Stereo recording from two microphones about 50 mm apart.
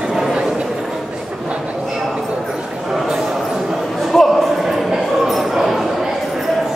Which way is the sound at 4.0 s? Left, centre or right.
Centre.